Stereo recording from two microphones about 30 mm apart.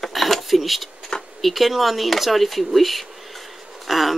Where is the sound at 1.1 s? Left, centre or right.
Left.